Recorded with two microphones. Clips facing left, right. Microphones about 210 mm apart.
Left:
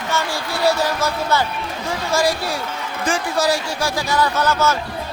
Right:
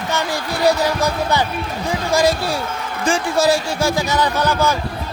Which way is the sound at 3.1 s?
25° right (ahead or behind).